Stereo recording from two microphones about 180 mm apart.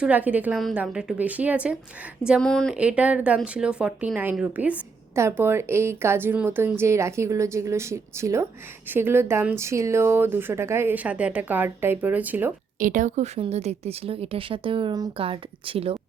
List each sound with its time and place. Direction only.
0.0 s speech: 10° right (ahead or behind)
2.7 s speech: 5° right (ahead or behind)
12.8 s a woman's voice: 45° right (ahead or behind)